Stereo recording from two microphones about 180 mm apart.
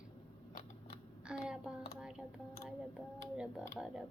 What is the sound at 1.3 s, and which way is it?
Speech, 5° right (ahead or behind).